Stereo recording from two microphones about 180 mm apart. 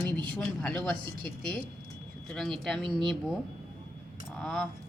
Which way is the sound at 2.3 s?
Centre (ahead or behind).